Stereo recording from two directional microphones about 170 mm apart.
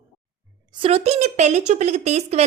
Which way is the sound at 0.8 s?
40° right (ahead or behind).